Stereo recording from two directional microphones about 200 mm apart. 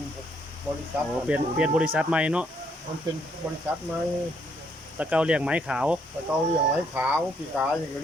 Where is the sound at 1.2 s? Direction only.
5° right (ahead or behind).